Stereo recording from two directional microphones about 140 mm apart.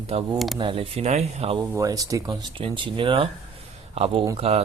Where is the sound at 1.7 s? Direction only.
25° right (ahead or behind).